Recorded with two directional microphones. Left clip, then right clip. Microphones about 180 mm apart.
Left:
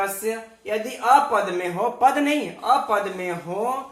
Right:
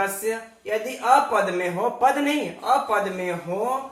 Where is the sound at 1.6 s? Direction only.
35° left (ahead or behind).